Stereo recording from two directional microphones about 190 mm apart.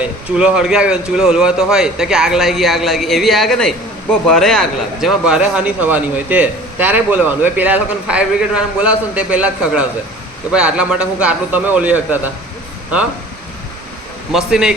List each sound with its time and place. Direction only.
0.0 s a man's voice: 5° right (ahead or behind)
14.3 s a man's voice: 5° right (ahead or behind)